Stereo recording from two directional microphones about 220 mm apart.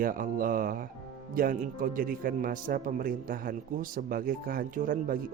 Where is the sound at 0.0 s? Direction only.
40° right (ahead or behind).